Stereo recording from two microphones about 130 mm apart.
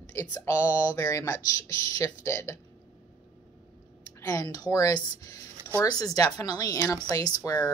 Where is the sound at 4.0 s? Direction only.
25° left (ahead or behind).